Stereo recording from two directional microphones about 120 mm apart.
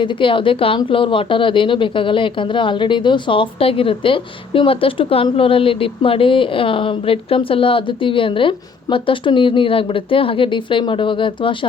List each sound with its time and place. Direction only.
0.0 s speech: 45° left (ahead or behind)